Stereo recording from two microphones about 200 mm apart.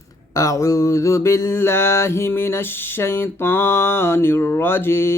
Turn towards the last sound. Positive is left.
turn(degrees=10)  # may be behind; listen again after turning